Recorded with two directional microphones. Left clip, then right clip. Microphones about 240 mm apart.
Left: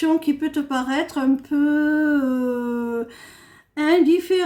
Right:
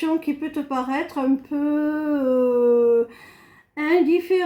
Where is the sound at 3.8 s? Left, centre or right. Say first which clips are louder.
Left 2 dB; left.